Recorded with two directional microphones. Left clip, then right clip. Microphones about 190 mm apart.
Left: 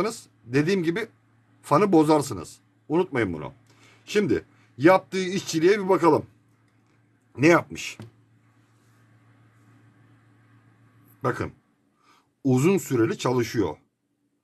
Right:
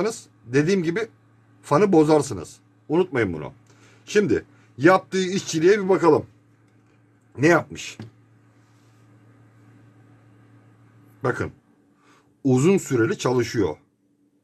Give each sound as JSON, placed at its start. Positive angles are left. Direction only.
{"t": 0.0, "sound": "a man's voice", "side_deg": 20}
{"t": 7.3, "sound": "speech", "side_deg": 30}
{"t": 11.1, "sound": "speech", "side_deg": 20}